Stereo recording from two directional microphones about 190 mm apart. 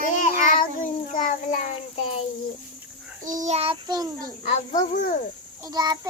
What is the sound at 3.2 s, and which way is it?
A child's voice, 40° right (ahead or behind).